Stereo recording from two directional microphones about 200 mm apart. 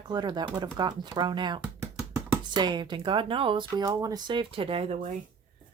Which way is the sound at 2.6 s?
20° right (ahead or behind).